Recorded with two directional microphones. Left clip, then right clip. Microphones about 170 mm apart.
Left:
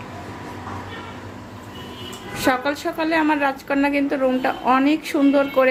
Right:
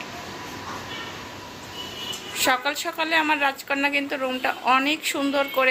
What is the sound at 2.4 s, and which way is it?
A woman's voice, 5° right (ahead or behind).